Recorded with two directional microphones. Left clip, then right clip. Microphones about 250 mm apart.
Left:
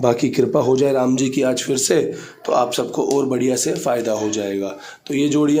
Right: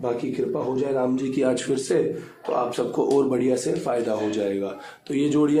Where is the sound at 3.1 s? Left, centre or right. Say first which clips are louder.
Left 2 dB; left.